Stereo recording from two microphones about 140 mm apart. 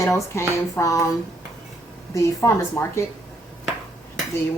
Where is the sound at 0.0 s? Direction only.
20° left (ahead or behind).